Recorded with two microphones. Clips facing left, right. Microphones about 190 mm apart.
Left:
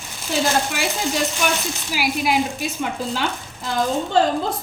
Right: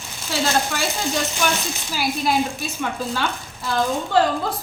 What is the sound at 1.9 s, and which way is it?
Speech, 10° left (ahead or behind).